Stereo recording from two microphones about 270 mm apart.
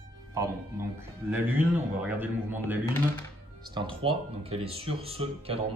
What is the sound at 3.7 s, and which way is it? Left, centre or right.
Speech, centre.